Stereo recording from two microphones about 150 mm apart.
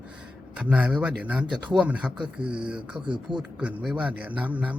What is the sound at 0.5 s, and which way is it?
Speech, 10° right (ahead or behind).